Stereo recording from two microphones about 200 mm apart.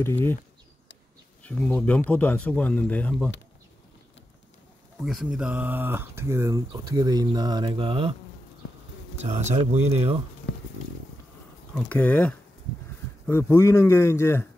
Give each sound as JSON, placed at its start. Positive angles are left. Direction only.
{"t": 0.0, "sound": "speech", "side_deg": 10}
{"t": 1.4, "sound": "speech", "side_deg": 5}
{"t": 5.0, "sound": "speech", "side_deg": -5}
{"t": 9.2, "sound": "speech", "side_deg": -35}
{"t": 11.7, "sound": "speech", "side_deg": 5}